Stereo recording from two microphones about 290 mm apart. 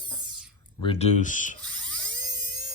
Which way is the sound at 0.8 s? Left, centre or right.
Centre.